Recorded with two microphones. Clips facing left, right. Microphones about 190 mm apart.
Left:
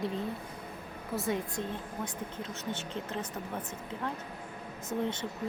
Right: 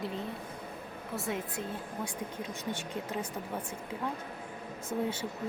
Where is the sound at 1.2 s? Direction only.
Centre (ahead or behind).